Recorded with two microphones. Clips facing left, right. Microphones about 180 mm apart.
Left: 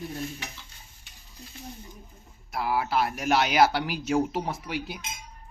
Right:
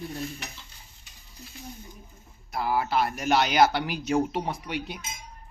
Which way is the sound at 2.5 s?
Centre (ahead or behind).